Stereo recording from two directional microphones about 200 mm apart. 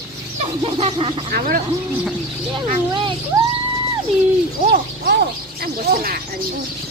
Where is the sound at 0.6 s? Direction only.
25° right (ahead or behind).